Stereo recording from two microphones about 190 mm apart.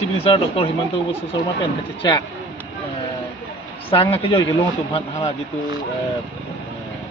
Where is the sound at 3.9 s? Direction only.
30° left (ahead or behind).